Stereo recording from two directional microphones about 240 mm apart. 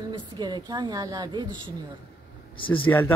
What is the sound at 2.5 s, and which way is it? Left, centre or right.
Speech, left.